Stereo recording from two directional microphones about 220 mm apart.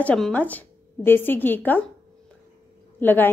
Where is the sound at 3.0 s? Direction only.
10° left (ahead or behind).